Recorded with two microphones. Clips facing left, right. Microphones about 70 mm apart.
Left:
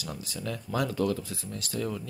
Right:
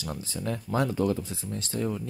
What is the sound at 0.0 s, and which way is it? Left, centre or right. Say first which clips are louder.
Speech: right 3 dB; right.